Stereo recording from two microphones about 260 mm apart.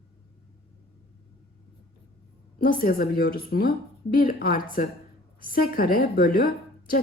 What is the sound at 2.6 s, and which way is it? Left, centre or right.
A woman's voice, left.